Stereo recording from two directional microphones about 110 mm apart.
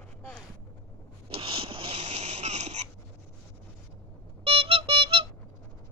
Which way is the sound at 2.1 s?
80° right.